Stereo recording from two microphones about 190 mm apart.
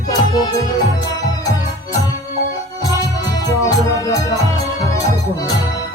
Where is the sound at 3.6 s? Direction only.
20° left (ahead or behind).